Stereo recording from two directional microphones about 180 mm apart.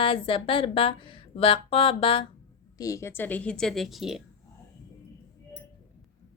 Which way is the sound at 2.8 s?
20° left (ahead or behind).